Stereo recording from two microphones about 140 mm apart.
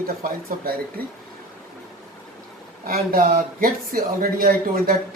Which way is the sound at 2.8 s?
90° right.